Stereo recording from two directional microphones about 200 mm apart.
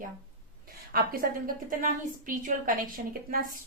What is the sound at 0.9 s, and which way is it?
A woman's voice, 45° right (ahead or behind).